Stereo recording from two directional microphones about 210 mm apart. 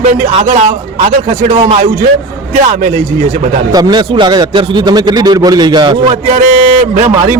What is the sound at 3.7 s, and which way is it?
A man's voice, 20° right (ahead or behind).